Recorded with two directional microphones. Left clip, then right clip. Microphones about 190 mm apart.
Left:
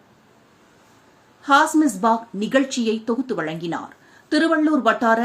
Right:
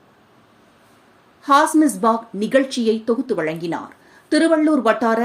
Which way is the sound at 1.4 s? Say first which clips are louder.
Right 1 dB; 10° right (ahead or behind).